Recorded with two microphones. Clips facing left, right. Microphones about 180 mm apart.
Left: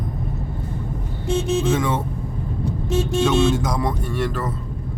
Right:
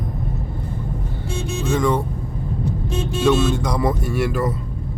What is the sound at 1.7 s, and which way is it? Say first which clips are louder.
Speech: right 3 dB; 5° left (ahead or behind).